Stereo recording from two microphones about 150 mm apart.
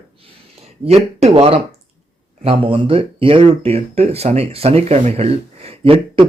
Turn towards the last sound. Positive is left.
turn(degrees=-35)  # may be behind; listen again after turning